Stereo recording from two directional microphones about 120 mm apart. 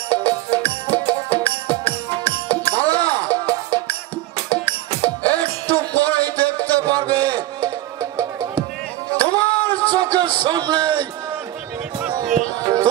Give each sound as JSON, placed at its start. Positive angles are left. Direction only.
{"t": 0.1, "sound": "music", "side_deg": 15}
{"t": 6.9, "sound": "music", "side_deg": -35}
{"t": 9.2, "sound": "music", "side_deg": 15}
{"t": 9.9, "sound": "a sound", "side_deg": -35}
{"t": 12.5, "sound": "music", "side_deg": -30}